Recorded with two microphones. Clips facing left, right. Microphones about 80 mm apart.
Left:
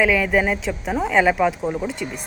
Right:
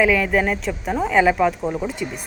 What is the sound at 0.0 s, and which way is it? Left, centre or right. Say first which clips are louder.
Speech: even; centre.